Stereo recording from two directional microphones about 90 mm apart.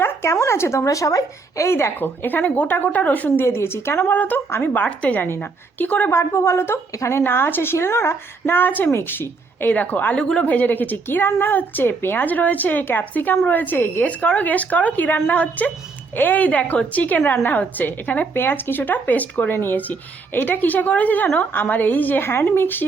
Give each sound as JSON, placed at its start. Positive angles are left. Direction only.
{"t": 0.0, "sound": "speech", "side_deg": 30}
{"t": 6.1, "sound": "speech", "side_deg": 30}